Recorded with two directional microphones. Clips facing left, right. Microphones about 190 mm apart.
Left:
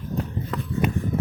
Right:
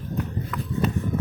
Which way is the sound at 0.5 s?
30° left (ahead or behind).